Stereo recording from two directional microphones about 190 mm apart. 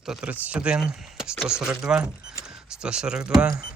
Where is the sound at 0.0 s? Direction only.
5° right (ahead or behind).